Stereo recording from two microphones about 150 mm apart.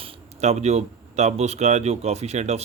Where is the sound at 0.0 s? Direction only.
45° right (ahead or behind).